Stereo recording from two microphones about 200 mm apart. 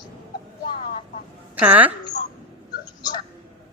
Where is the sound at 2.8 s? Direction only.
20° left (ahead or behind).